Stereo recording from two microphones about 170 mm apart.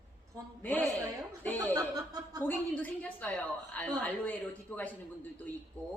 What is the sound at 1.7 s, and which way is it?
Speech, 20° right (ahead or behind).